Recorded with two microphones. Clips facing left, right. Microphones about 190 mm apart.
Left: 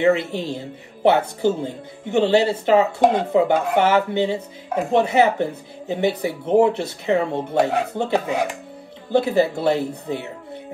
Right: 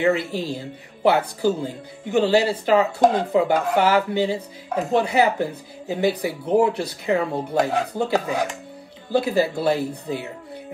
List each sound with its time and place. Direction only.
0.0 s speech: 25° left (ahead or behind)